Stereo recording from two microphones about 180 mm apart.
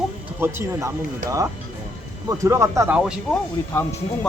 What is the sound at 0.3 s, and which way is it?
Speech, 15° right (ahead or behind).